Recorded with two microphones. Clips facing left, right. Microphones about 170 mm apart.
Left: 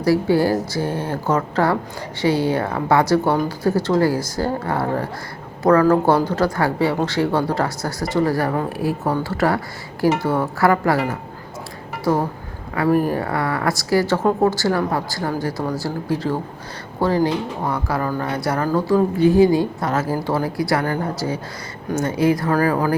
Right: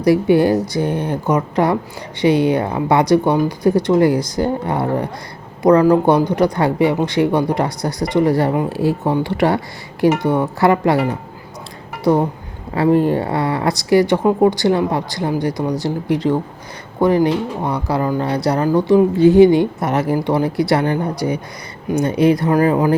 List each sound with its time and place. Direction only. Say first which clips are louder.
0.0 s speech: right 4 dB; 20° right (ahead or behind)
12.7 s speech: right 4 dB; 25° right (ahead or behind)